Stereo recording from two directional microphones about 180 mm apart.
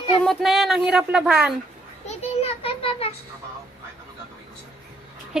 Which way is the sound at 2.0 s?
30° left (ahead or behind).